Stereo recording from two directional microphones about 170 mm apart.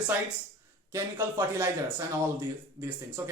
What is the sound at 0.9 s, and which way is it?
A man's voice, 15° right (ahead or behind).